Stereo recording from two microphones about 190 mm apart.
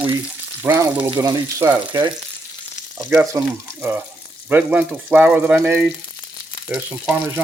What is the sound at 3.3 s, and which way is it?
Speech, 10° right (ahead or behind).